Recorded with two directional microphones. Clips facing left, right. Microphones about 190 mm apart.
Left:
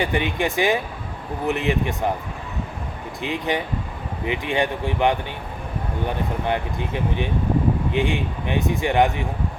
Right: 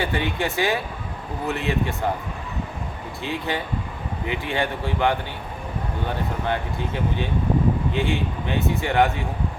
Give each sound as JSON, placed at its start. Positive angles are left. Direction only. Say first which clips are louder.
{"t": 0.0, "sound": "a man's voice", "louder": "left 2 dB", "side_deg": 15}
{"t": 3.2, "sound": "a man's voice", "louder": "left 3 dB", "side_deg": 15}